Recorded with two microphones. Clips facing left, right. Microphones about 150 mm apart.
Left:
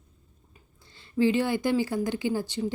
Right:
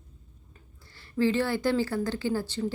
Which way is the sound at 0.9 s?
20° left (ahead or behind).